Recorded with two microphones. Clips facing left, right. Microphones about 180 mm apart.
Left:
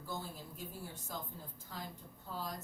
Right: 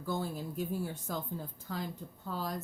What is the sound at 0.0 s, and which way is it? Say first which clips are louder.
A woman's voice: right 9 dB; 70° right (ahead or behind).